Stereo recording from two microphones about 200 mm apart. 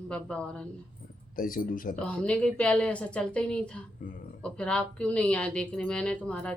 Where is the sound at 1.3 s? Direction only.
45° left (ahead or behind).